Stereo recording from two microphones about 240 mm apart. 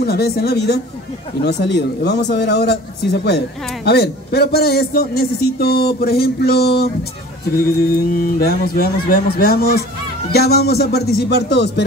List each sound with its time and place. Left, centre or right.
0.0 s a man's voice: left